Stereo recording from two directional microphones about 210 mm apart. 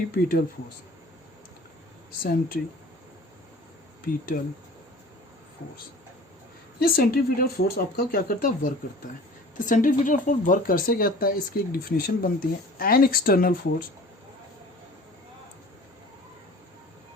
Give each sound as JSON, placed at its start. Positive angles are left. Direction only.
{"t": 0.1, "sound": "speech", "side_deg": 45}
{"t": 2.2, "sound": "speech", "side_deg": 45}
{"t": 4.3, "sound": "speech", "side_deg": 40}
{"t": 6.7, "sound": "speech", "side_deg": 45}